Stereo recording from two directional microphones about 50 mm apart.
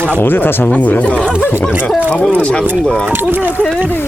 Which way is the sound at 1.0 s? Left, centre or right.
Centre.